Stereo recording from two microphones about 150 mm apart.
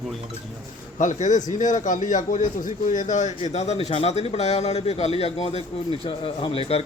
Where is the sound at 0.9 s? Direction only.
55° left (ahead or behind).